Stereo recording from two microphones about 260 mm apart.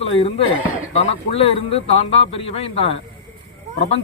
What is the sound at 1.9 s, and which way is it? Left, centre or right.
Speech, left.